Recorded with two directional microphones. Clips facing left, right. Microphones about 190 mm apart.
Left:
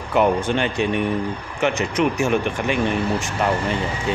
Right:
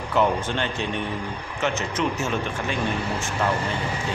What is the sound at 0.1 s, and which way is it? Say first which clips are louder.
Speech: left 4 dB; 15° left (ahead or behind).